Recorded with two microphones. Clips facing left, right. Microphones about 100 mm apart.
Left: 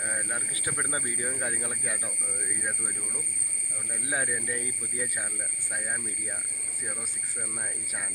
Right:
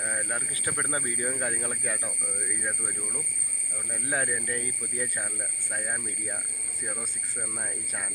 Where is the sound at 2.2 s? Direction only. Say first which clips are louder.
Right 1 dB; 5° right (ahead or behind).